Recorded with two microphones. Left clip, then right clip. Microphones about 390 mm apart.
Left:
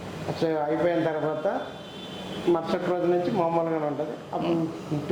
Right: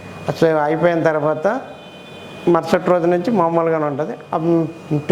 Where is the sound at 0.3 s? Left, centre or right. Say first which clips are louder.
Right 10 dB; right.